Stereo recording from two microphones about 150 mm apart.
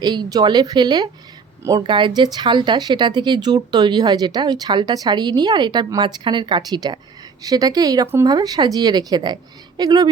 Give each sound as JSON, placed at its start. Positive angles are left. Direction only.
{"t": 0.0, "sound": "speech", "side_deg": -30}